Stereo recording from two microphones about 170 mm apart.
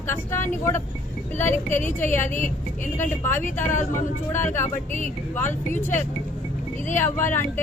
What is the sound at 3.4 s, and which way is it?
Speech, 50° left (ahead or behind).